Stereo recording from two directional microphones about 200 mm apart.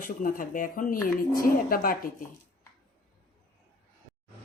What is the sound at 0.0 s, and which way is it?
Speech, 40° left (ahead or behind).